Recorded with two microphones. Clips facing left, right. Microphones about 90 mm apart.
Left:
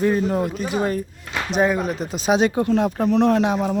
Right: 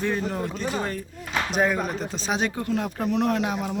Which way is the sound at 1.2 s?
Centre (ahead or behind).